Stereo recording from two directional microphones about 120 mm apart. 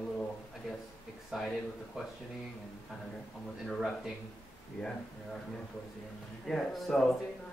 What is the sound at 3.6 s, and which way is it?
Speech, centre (ahead or behind).